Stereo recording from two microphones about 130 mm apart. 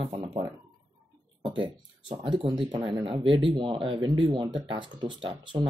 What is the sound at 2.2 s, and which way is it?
Speech, 40° right (ahead or behind).